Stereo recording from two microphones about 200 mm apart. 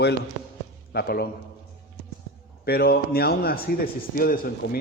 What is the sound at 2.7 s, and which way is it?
A man's voice, 50° left (ahead or behind).